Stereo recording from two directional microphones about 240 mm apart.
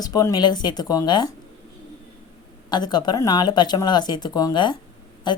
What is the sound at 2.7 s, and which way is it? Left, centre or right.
A woman's voice, centre.